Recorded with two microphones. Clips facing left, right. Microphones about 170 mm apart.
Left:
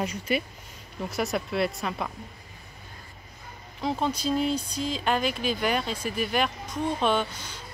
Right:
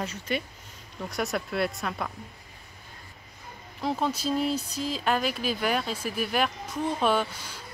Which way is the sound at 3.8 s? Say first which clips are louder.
Left 1 dB; centre (ahead or behind).